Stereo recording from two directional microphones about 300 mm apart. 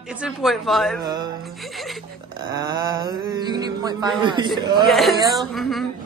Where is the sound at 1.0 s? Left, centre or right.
Centre.